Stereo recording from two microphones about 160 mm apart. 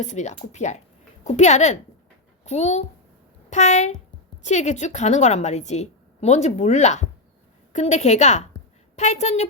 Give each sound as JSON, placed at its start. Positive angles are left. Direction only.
{"t": 0.0, "sound": "a woman's voice", "side_deg": 45}